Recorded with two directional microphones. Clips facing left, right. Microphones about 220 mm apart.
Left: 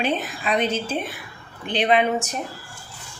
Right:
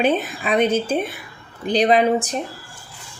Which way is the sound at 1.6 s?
40° right (ahead or behind).